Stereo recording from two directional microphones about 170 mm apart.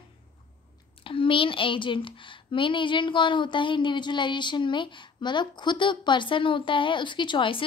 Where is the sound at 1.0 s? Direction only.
30° left (ahead or behind).